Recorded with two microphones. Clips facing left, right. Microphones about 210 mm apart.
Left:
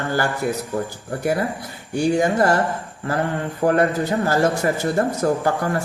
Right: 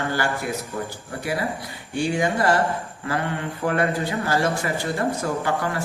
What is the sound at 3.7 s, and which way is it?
Speech, 45° left (ahead or behind).